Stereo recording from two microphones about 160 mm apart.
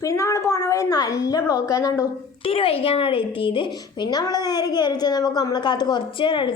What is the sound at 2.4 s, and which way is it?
Speech, 35° left (ahead or behind).